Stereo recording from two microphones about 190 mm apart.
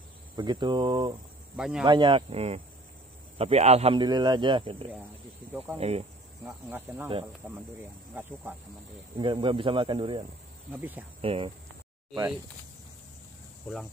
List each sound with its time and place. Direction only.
0.4 s a man's voice: 25° right (ahead or behind)
1.6 s speech: 5° right (ahead or behind)
1.9 s a man's voice: 25° right (ahead or behind)
6.4 s speech: 10° right (ahead or behind)
9.2 s a man's voice: 25° right (ahead or behind)
10.7 s speech: 10° right (ahead or behind)
11.1 s a man's voice: 30° right (ahead or behind)